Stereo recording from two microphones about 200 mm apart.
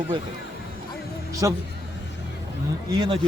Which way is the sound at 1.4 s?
15° right (ahead or behind).